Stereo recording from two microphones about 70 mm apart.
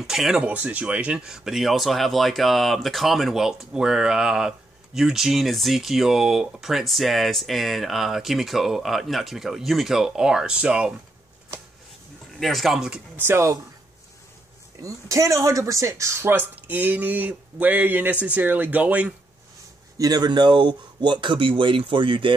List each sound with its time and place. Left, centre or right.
0.0 s speech: centre
0.5 s speech: right
12.4 s speech: centre
13.1 s speech: right
14.8 s speech: right
20.0 s speech: right